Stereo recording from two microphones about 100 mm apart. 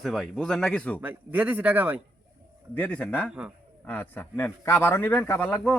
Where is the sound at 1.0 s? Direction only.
15° right (ahead or behind).